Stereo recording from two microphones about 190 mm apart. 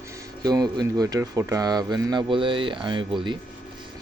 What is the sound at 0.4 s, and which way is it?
Speech, 20° right (ahead or behind).